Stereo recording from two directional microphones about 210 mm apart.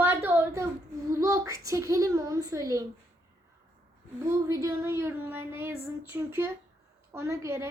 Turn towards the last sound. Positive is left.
turn(degrees=-15)  # may be behind; listen again after turning